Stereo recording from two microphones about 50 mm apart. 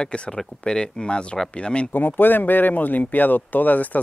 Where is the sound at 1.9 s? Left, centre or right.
Left.